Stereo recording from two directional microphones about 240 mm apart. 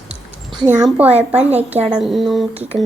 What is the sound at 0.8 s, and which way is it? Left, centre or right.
Speech, centre.